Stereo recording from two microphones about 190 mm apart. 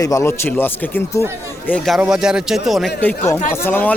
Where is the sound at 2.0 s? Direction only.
5° right (ahead or behind).